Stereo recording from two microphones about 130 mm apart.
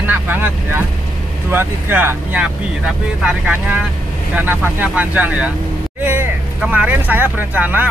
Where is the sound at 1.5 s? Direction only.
15° right (ahead or behind).